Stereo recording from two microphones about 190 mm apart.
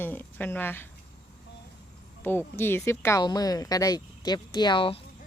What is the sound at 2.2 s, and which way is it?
Speech, 10° left (ahead or behind).